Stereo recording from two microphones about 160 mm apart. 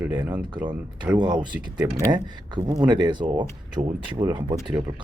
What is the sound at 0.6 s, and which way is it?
Speech, 10° right (ahead or behind).